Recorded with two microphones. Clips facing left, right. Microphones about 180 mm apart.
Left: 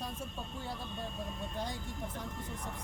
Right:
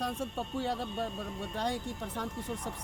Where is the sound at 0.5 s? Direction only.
85° right.